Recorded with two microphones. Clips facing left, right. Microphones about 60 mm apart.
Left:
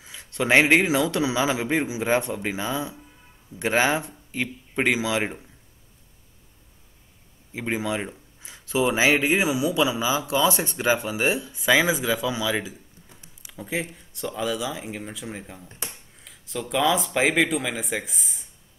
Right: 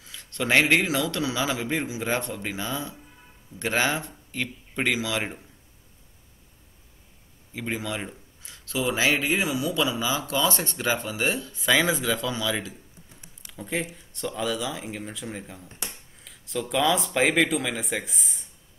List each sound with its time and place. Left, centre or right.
0.0 s speech: centre
7.5 s speech: centre
13.4 s a sound: centre
13.8 s speech: centre